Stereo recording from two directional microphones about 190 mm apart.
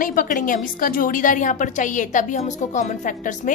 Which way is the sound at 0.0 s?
45° left (ahead or behind).